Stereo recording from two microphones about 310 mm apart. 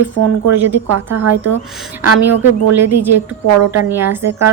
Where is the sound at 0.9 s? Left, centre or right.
Right.